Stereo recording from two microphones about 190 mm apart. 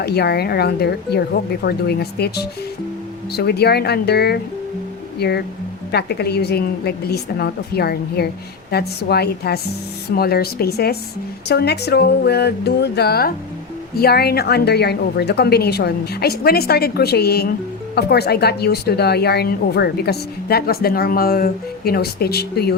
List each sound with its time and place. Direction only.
0.0 s a woman's voice: 60° left (ahead or behind)